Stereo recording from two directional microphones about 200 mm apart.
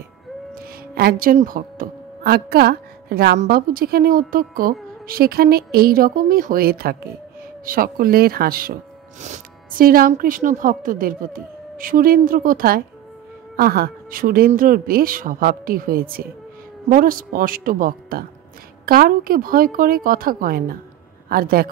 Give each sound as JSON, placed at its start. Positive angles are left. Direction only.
{"t": 0.6, "sound": "speech", "side_deg": -50}